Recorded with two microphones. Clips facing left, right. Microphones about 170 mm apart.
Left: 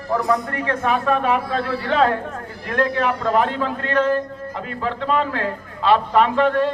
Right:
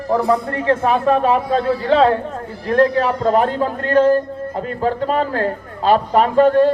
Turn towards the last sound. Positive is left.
turn(degrees=-40)  # may be behind; listen again after turning